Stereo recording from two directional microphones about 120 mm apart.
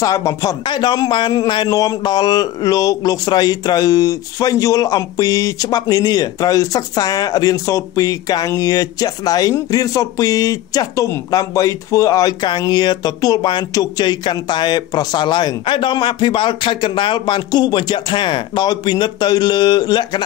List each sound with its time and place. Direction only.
0.0 s speech: 30° left (ahead or behind)